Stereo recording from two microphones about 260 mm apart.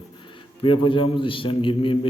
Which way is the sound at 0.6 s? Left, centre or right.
Centre.